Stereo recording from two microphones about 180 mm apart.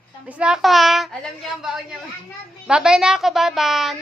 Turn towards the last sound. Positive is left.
turn(degrees=0)  # may be behind; listen again after turning